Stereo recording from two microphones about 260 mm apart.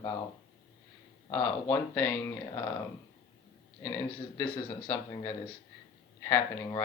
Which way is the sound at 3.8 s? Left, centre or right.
Centre.